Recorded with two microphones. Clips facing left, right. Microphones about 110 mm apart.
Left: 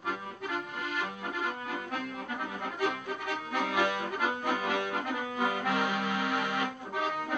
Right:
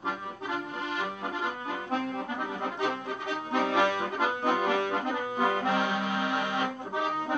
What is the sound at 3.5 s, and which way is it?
Accordion, 30° right (ahead or behind).